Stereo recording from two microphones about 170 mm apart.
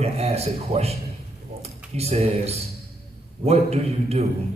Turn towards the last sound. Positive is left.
turn(degrees=-40)  # may be behind; listen again after turning